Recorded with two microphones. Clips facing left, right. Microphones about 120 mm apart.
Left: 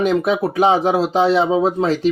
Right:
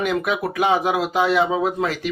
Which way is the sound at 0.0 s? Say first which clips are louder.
Left 5 dB; 30° left (ahead or behind).